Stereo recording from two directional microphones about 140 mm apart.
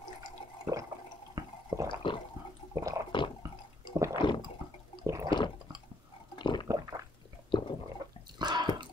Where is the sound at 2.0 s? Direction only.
35° left (ahead or behind).